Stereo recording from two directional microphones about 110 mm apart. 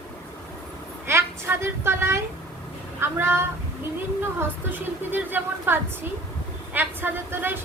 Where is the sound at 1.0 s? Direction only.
25° right (ahead or behind).